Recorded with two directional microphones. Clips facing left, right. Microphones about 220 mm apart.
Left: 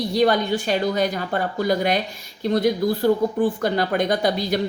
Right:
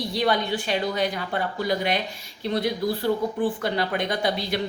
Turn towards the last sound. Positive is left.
turn(degrees=40)  # may be behind; listen again after turning